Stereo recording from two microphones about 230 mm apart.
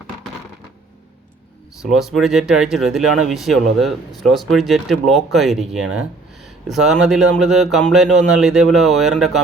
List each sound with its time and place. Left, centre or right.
1.8 s speech: centre